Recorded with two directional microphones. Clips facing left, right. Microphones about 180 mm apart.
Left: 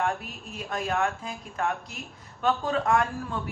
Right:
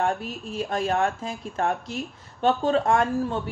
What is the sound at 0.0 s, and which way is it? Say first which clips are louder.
A woman's voice: right 4 dB; 30° right (ahead or behind).